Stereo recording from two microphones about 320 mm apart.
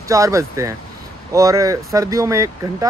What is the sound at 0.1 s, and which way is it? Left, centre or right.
Speech, centre.